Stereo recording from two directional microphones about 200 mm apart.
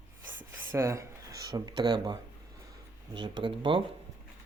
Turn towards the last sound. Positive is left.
turn(degrees=-25)  # may be behind; listen again after turning